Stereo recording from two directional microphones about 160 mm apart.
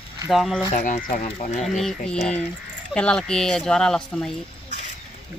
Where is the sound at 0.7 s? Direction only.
50° left (ahead or behind).